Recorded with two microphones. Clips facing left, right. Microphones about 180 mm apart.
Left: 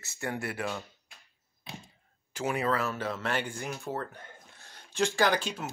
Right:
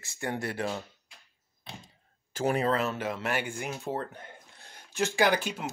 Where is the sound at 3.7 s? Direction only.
25° right (ahead or behind).